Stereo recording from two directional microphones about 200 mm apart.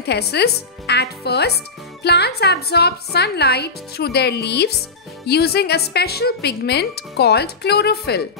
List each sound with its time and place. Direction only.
0.0 s a woman's voice: 55° left (ahead or behind)